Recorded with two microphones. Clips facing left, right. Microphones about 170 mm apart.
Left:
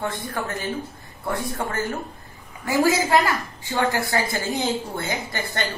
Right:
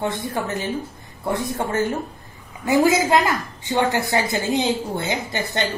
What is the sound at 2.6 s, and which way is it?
A woman's voice, 20° right (ahead or behind).